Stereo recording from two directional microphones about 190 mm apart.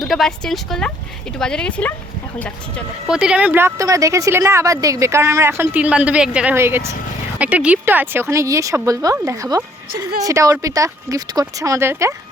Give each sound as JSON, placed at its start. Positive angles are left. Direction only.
{"t": 0.0, "sound": "speech", "side_deg": 0}
{"t": 3.1, "sound": "a woman's voice", "side_deg": -5}